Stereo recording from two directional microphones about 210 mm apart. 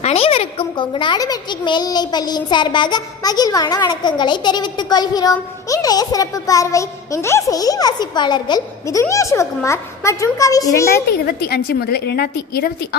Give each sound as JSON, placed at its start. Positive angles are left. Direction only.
{"t": 0.0, "sound": "a child's voice", "side_deg": 30}
{"t": 11.4, "sound": "a woman's voice", "side_deg": 50}